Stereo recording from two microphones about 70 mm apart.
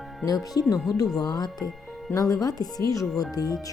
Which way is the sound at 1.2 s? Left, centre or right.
Left.